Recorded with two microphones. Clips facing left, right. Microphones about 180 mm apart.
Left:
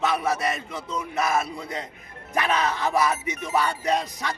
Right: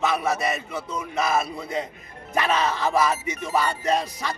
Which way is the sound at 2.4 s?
15° left (ahead or behind).